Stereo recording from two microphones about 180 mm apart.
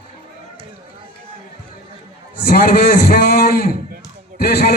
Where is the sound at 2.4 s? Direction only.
60° left (ahead or behind).